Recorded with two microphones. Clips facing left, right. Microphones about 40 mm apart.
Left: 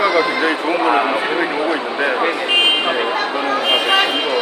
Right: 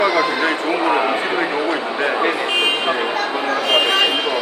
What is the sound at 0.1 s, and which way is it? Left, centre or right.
Neigh, centre.